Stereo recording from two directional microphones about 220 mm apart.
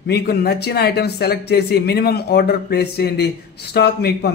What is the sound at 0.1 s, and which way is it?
A man's voice, 45° left (ahead or behind).